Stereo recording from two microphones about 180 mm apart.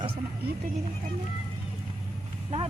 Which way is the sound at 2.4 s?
30° right (ahead or behind).